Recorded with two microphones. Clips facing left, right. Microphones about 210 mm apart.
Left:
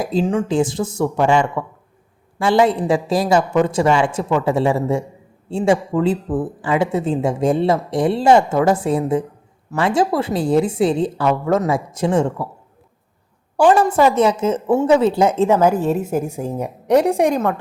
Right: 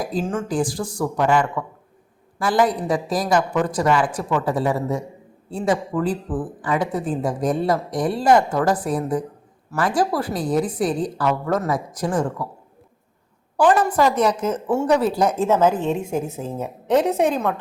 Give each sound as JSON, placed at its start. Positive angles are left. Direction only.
{"t": 0.3, "sound": "speech", "side_deg": 20}
{"t": 13.6, "sound": "a woman's voice", "side_deg": 25}